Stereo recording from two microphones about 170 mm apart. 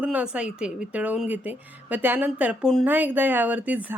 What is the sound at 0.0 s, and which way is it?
Speech, 10° right (ahead or behind).